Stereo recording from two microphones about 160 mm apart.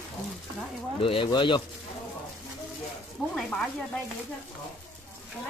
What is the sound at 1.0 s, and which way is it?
Speech, 30° left (ahead or behind).